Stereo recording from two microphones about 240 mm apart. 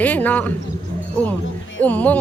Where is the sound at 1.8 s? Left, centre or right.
Centre.